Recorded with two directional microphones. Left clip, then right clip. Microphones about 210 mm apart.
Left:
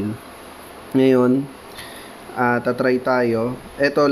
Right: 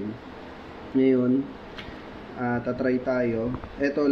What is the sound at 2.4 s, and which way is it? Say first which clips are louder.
Speech: left 8 dB; 60° left (ahead or behind).